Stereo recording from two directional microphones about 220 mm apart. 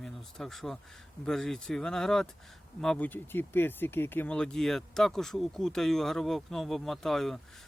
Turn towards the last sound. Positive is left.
turn(degrees=0)  # may be behind; listen again after turning